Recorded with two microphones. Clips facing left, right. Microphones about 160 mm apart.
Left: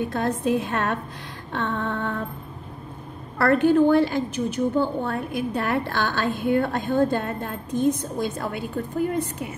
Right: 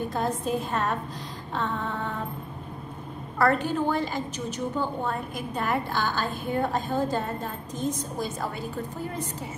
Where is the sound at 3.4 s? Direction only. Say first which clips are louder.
Left 7 dB; 60° left (ahead or behind).